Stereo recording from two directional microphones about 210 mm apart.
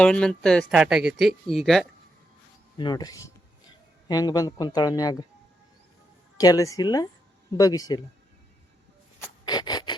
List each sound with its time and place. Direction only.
0.0 s speech: 5° left (ahead or behind)
2.7 s a man's voice: 20° left (ahead or behind)
6.3 s a man's voice: 15° left (ahead or behind)
9.1 s a sound: 15° left (ahead or behind)